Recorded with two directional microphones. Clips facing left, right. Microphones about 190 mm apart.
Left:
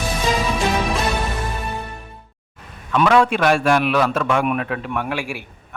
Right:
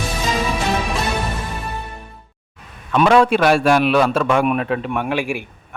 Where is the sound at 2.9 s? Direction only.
30° right (ahead or behind).